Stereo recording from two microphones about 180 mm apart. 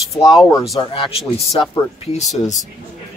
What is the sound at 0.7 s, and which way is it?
Speech, 25° left (ahead or behind).